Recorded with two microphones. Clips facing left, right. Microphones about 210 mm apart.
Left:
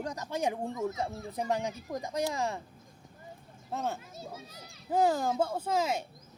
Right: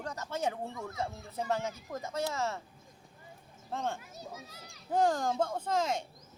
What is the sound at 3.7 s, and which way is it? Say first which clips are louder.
Speech: left 1 dB; 5° left (ahead or behind).